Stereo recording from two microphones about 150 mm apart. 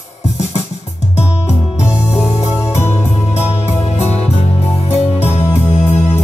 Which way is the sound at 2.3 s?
45° left (ahead or behind).